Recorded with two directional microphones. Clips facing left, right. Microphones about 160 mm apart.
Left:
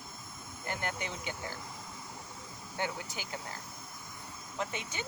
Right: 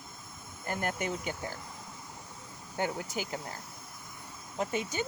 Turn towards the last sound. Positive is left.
turn(degrees=-40)  # may be behind; listen again after turning